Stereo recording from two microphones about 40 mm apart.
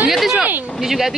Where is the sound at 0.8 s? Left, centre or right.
Centre.